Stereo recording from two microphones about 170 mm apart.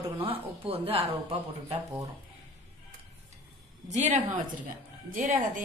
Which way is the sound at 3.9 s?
45° right (ahead or behind).